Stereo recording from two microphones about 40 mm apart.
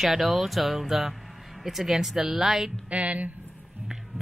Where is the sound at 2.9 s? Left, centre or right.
Right.